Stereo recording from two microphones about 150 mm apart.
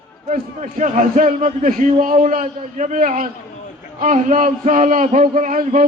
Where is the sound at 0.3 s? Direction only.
55° right (ahead or behind).